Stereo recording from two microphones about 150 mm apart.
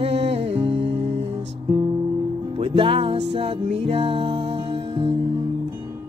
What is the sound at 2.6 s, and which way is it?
Music, 35° right (ahead or behind).